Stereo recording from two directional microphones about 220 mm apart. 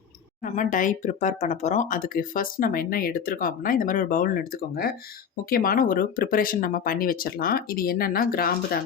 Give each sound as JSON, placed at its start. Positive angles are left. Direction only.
{"t": 0.4, "sound": "speech", "side_deg": 35}